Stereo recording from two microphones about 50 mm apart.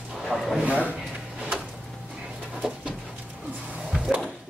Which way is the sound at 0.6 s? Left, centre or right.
Right.